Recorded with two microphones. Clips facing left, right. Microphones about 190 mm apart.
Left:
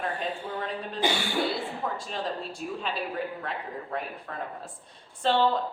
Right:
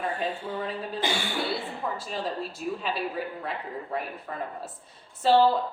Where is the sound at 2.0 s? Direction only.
5° right (ahead or behind).